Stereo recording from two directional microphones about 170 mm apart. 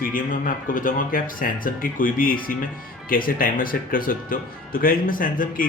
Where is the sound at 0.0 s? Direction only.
50° left (ahead or behind).